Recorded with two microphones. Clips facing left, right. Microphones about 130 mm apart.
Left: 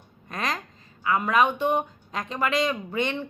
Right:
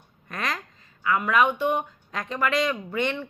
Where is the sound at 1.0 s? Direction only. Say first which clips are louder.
Even; 25° left (ahead or behind).